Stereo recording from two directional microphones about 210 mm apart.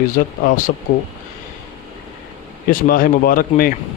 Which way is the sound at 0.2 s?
45° left (ahead or behind).